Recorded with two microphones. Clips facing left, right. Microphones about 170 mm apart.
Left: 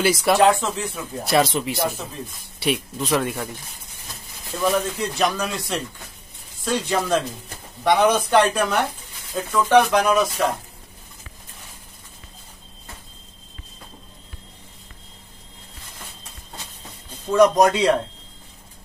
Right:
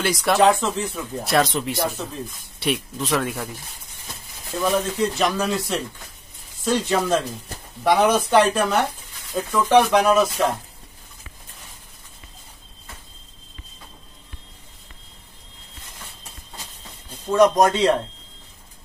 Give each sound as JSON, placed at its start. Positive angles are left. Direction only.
{"t": 0.0, "sound": "speech", "side_deg": 5}
{"t": 4.6, "sound": "speech", "side_deg": 0}
{"t": 17.3, "sound": "speech", "side_deg": 0}